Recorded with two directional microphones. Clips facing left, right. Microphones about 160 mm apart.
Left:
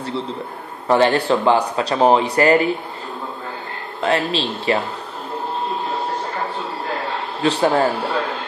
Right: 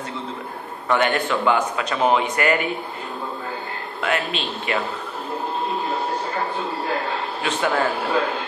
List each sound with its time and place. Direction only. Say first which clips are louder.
0.8 s speech: left 5 dB; 30° left (ahead or behind)
4.0 s speech: left 5 dB; 35° left (ahead or behind)
7.4 s speech: left 6 dB; 35° left (ahead or behind)